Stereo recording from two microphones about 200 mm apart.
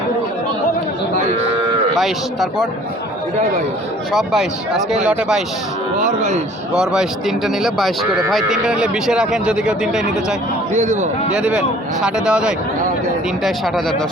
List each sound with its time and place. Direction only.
2.0 s speech: centre (ahead or behind)
4.1 s speech: centre (ahead or behind)
6.1 s speech: 35° right (ahead or behind)
6.7 s speech: 5° right (ahead or behind)
10.8 s speech: 35° right (ahead or behind)
11.3 s speech: 5° right (ahead or behind)